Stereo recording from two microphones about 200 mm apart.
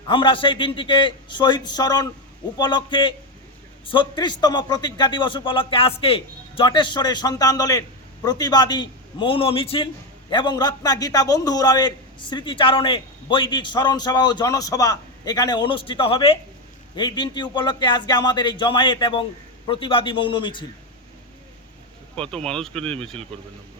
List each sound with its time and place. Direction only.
0.1 s a man's voice: 25° left (ahead or behind)
22.1 s speech: 5° left (ahead or behind)